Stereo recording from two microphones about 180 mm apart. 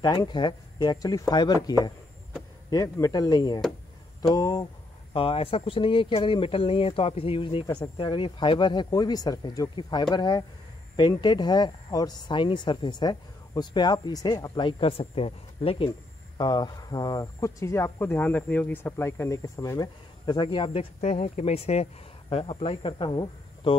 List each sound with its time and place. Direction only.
0.0 s speech: 25° left (ahead or behind)
5.1 s speech: 30° left (ahead or behind)